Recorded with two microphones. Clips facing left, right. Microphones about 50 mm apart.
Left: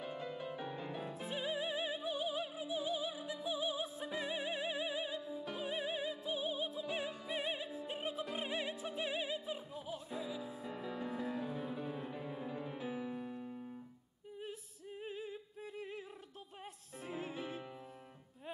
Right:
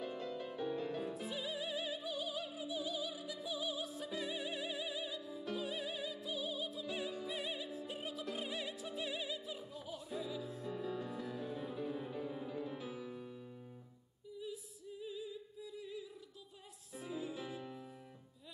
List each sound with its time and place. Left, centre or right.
0.0 s music: centre
1.1 s music: left
10.2 s music: centre
10.7 s music: left
11.4 s music: centre
14.4 s singing: left
17.0 s music: left